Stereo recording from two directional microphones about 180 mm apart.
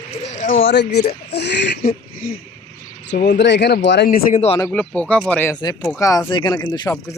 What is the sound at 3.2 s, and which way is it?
Speech, 75° left (ahead or behind).